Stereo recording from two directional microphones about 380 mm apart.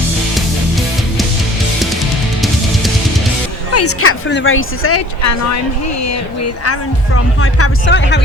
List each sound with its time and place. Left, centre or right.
3.7 s a woman's voice: left
7.4 s speech: left